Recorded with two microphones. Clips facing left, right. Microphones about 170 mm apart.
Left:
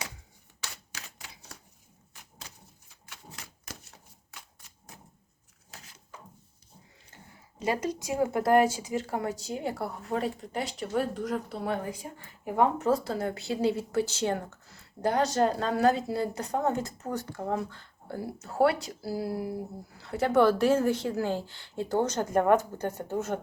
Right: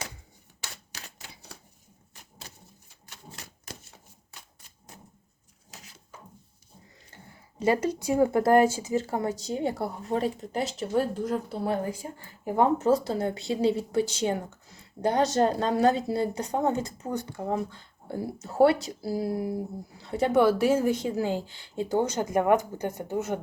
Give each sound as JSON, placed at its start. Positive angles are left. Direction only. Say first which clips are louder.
{"t": 7.6, "sound": "a woman's voice", "louder": "right 5 dB", "side_deg": -30}